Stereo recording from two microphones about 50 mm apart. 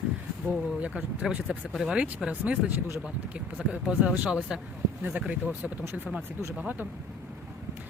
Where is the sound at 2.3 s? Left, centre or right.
Right.